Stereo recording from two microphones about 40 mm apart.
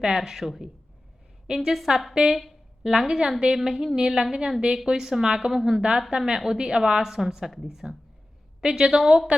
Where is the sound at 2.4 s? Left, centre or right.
Centre.